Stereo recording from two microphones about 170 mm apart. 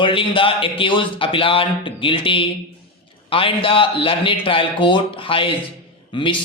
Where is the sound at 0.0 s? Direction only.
30° left (ahead or behind).